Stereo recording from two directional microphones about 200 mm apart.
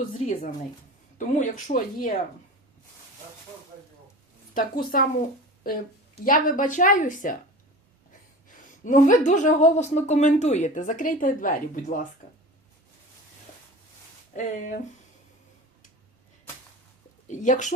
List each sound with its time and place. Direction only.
0.1 s a woman's voice: 40° left (ahead or behind)
4.5 s speech: 45° left (ahead or behind)
6.2 s a woman's voice: 40° left (ahead or behind)
8.4 s a woman's voice: 40° left (ahead or behind)
14.3 s a woman's voice: 40° left (ahead or behind)
17.2 s a woman's voice: 40° left (ahead or behind)